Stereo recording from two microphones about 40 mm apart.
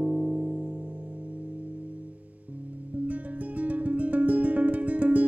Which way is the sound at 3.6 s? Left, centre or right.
Right.